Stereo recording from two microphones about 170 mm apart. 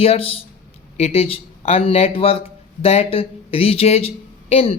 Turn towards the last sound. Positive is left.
turn(degrees=35)  # may be behind; listen again after turning